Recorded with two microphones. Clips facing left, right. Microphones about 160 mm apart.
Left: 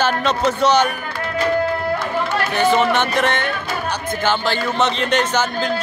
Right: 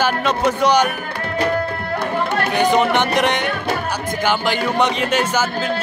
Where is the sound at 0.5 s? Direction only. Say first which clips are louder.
Even; 15° right (ahead or behind).